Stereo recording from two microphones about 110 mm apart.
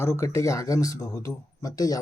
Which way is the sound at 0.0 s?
25° left (ahead or behind).